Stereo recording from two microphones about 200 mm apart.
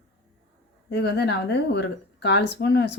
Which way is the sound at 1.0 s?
55° left (ahead or behind).